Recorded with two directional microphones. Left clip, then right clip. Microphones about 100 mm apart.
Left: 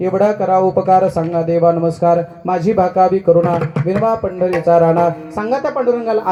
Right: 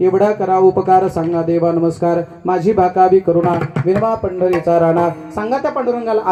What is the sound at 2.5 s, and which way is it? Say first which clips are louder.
Speech: right 1 dB; 25° right (ahead or behind).